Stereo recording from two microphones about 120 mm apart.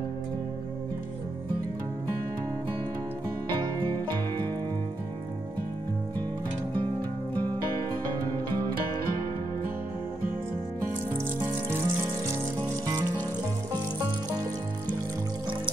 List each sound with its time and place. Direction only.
11.4 s water: 20° right (ahead or behind)
11.8 s music: 25° right (ahead or behind)